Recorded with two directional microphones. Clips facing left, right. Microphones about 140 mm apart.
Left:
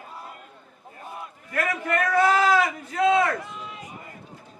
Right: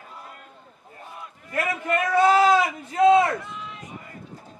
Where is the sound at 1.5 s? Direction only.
20° right (ahead or behind).